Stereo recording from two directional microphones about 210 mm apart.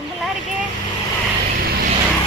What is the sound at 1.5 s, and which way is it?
Vehicle, 45° right (ahead or behind).